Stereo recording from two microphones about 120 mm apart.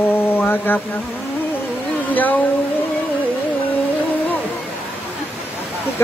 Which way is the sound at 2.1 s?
15° left (ahead or behind).